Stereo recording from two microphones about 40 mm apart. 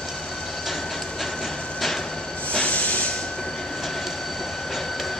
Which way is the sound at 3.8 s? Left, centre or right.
Centre.